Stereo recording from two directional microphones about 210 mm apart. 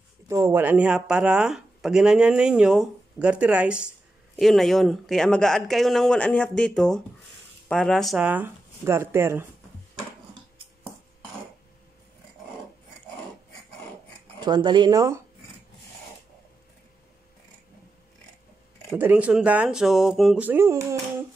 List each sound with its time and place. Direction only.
0.3 s speech: 10° right (ahead or behind)
14.4 s speech: 20° right (ahead or behind)
18.9 s speech: 10° right (ahead or behind)